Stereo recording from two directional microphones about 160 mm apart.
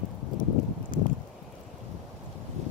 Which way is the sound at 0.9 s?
55° left (ahead or behind).